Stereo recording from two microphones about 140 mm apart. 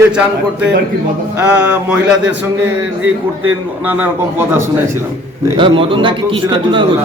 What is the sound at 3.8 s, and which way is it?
Speech, 15° right (ahead or behind).